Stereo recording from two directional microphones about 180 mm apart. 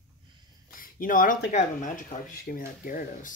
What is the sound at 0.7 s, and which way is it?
Speech, 50° left (ahead or behind).